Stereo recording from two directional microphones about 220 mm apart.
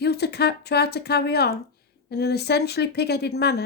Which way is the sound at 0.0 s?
45° left (ahead or behind).